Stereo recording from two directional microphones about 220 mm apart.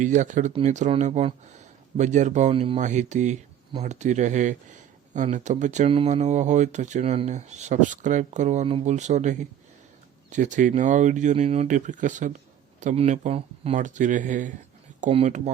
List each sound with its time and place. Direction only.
0.0 s speech: 35° right (ahead or behind)